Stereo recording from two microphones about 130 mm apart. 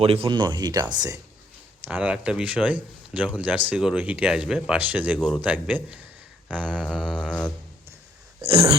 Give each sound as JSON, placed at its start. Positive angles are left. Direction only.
{"t": 0.0, "sound": "speech", "side_deg": -50}
{"t": 0.3, "sound": "speech", "side_deg": -35}
{"t": 1.8, "sound": "speech", "side_deg": -10}
{"t": 6.9, "sound": "music", "side_deg": -5}